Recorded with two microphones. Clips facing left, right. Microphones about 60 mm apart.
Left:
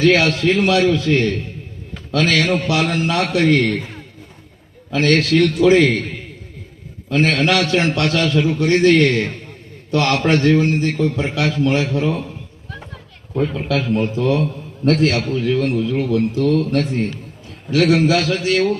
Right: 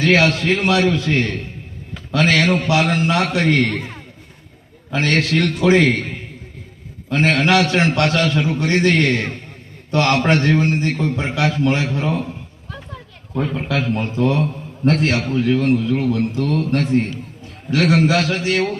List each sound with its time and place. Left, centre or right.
0.0 s a man's voice: right
4.9 s a man's voice: right
7.1 s a man's voice: right
13.5 s a man's voice: right